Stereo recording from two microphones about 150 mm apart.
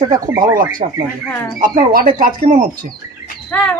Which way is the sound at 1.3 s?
15° left (ahead or behind).